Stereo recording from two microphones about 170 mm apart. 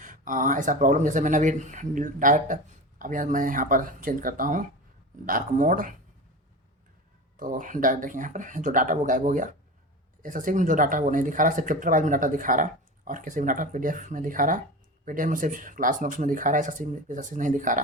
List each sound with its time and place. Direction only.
0.0 s speech: 50° right (ahead or behind)
7.3 s speech: 55° right (ahead or behind)